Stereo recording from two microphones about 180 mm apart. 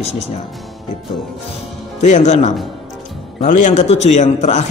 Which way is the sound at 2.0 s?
40° left (ahead or behind).